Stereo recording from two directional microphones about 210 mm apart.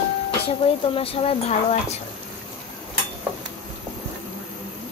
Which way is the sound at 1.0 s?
25° left (ahead or behind).